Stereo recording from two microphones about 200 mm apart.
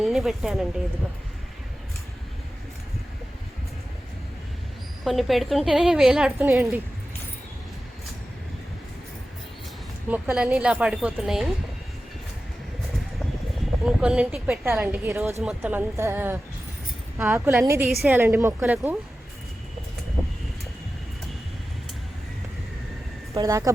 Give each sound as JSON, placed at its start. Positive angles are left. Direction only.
{"t": 0.0, "sound": "a woman's voice", "side_deg": 0}
{"t": 5.0, "sound": "a woman's voice", "side_deg": 0}
{"t": 10.1, "sound": "a woman's voice", "side_deg": -5}
{"t": 13.8, "sound": "speech", "side_deg": -5}
{"t": 23.3, "sound": "speech", "side_deg": -15}